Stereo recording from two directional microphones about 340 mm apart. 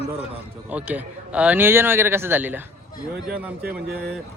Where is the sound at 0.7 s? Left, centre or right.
Centre.